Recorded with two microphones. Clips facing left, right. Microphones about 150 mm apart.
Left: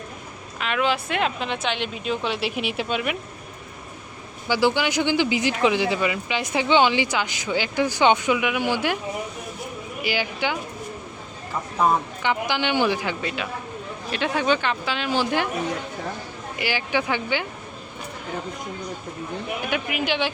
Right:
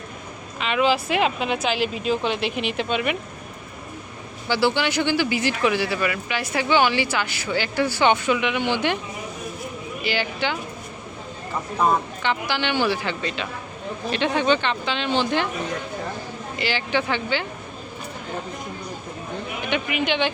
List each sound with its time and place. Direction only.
0.6 s a sound: centre (ahead or behind)
1.0 s speech: 5° right (ahead or behind)
4.4 s speech: 15° left (ahead or behind)
10.0 s speech: 10° left (ahead or behind)
12.2 s speech: 15° left (ahead or behind)
16.6 s speech: 10° left (ahead or behind)
19.6 s speech: 5° left (ahead or behind)